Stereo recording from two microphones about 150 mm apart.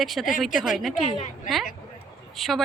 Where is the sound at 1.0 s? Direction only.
50° left (ahead or behind).